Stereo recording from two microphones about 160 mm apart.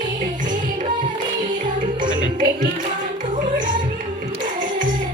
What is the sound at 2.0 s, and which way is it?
Music, 30° right (ahead or behind).